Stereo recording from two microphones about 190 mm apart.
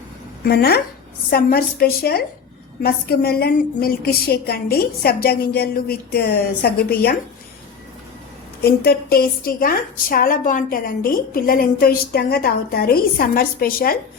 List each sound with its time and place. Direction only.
0.4 s a woman's voice: 55° left (ahead or behind)
8.6 s a woman's voice: 55° left (ahead or behind)